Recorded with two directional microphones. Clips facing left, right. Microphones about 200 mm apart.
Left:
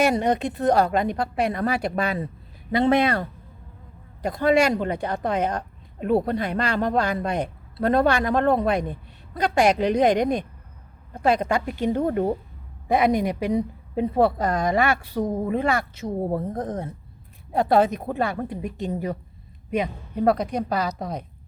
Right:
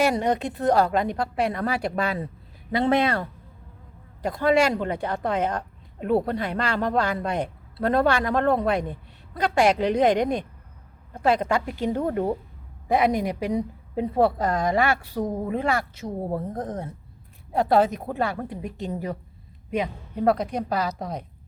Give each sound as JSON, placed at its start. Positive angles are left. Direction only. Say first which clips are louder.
{"t": 0.0, "sound": "a woman's voice", "louder": "left 1 dB", "side_deg": 20}
{"t": 17.6, "sound": "a woman's voice", "louder": "left 1 dB", "side_deg": 20}